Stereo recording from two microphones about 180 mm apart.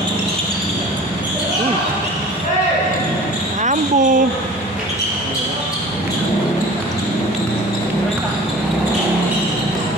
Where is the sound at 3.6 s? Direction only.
45° right (ahead or behind).